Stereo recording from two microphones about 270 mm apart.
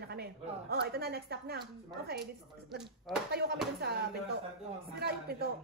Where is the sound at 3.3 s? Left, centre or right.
Right.